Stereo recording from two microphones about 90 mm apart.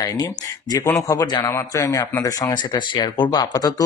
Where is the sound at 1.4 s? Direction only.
35° left (ahead or behind).